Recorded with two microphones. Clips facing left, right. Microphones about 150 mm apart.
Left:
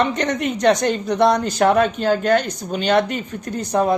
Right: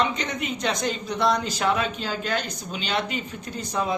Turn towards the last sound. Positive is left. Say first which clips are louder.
# left 8 dB
turn(degrees=55)  # may be behind; listen again after turning